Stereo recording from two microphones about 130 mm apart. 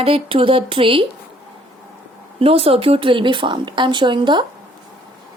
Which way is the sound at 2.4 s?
45° right (ahead or behind).